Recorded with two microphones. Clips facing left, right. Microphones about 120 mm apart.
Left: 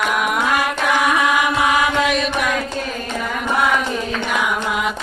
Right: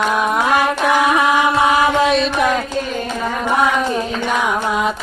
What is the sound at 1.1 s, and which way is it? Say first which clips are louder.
Chant: right 3 dB; 30° right (ahead or behind).